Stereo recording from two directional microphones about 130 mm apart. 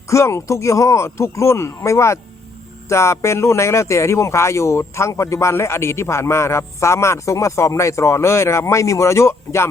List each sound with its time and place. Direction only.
0.1 s speech: 20° left (ahead or behind)